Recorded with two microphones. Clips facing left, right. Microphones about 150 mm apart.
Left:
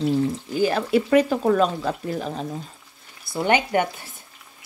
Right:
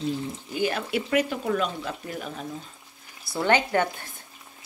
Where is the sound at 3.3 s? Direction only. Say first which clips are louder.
Left 2 dB; 15° left (ahead or behind).